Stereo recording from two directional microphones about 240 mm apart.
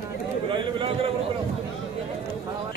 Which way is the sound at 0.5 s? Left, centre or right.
Right.